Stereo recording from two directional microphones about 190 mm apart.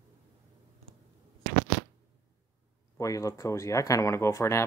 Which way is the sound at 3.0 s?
15° left (ahead or behind).